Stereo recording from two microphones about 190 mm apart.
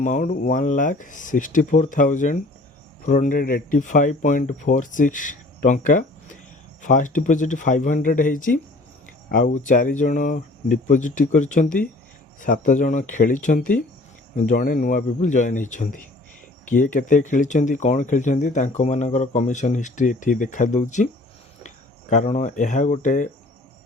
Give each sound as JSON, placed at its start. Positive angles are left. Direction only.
{"t": 0.0, "sound": "speech", "side_deg": 40}
{"t": 22.1, "sound": "speech", "side_deg": 40}